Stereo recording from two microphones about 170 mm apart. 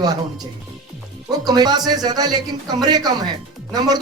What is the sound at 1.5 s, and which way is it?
Speech, 25° right (ahead or behind).